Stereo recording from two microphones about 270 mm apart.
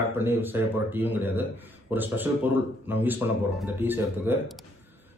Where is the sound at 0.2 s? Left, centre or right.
Centre.